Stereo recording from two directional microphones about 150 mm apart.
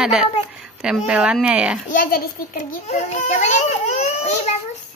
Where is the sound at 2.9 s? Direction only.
50° left (ahead or behind).